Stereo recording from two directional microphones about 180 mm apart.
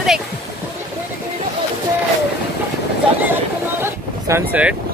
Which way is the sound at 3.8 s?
15° right (ahead or behind).